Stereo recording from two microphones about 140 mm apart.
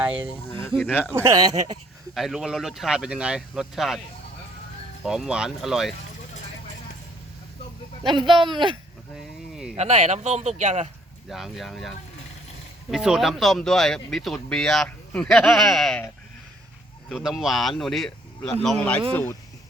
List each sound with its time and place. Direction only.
0.0 s speech: 10° right (ahead or behind)
0.4 s speech: 20° left (ahead or behind)
1.1 s speech: 20° right (ahead or behind)
2.1 s speech: centre (ahead or behind)
5.0 s speech: 5° right (ahead or behind)
8.0 s speech: 35° right (ahead or behind)
9.1 s a sound: 5° right (ahead or behind)
9.7 s speech: 50° right (ahead or behind)
11.3 s speech: centre (ahead or behind)
17.1 s speech: centre (ahead or behind); by 19.4 s 15° left (ahead or behind)